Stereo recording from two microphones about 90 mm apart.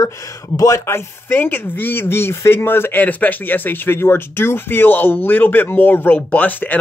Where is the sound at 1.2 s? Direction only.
25° left (ahead or behind).